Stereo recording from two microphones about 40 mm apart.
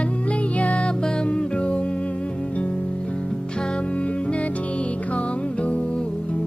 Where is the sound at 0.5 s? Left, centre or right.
Left.